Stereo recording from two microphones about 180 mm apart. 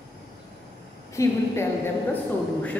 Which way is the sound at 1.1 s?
15° left (ahead or behind).